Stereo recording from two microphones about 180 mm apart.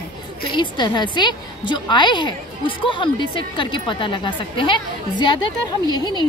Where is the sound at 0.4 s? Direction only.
25° left (ahead or behind).